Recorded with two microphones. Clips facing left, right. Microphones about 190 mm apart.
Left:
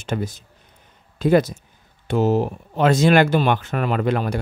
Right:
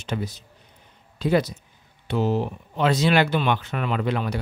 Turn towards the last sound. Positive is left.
turn(degrees=50)  # may be behind; listen again after turning